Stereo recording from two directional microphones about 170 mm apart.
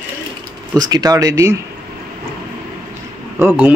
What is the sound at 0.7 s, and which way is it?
Speech, 20° right (ahead or behind).